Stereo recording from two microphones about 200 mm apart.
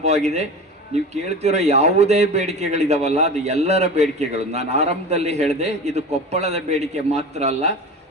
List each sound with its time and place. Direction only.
0.0 s a man's voice: 35° right (ahead or behind)